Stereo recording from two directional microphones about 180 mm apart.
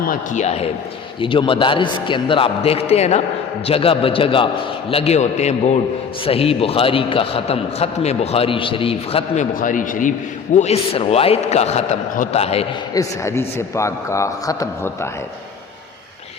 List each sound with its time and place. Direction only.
0.0 s a man's voice: 50° left (ahead or behind)
12.9 s a man's voice: 15° left (ahead or behind)